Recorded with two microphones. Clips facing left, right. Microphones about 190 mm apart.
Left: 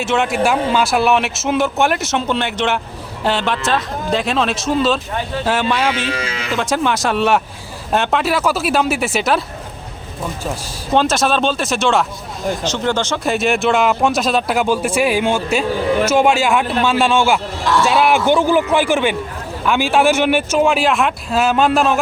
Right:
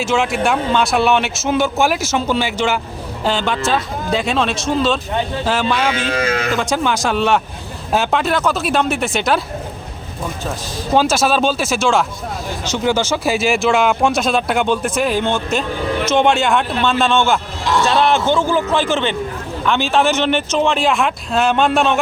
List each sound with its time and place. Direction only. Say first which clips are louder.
0.0 s speech: even; centre (ahead or behind)
6.1 s speech: right 5 dB; 45° right (ahead or behind)
6.5 s speech: even; centre (ahead or behind)
10.9 s speech: even; centre (ahead or behind)